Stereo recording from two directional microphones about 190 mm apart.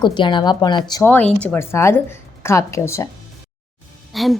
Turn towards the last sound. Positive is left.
turn(degrees=0)  # may be behind; listen again after turning